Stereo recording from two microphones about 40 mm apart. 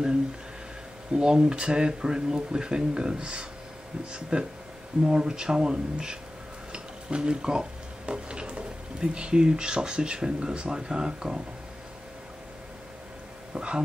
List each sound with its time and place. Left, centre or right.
1.1 s speech: right
6.7 s a sound: right
8.1 s speech: right
13.6 s speech: right